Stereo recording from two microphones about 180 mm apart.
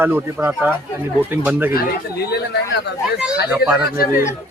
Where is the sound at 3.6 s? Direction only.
60° left (ahead or behind).